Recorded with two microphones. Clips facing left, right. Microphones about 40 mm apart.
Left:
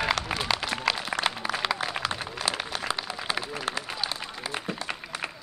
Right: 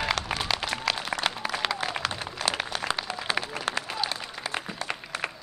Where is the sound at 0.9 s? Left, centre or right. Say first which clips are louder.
Left 2 dB; centre.